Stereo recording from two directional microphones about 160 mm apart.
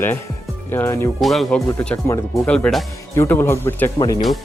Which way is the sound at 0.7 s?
15° left (ahead or behind).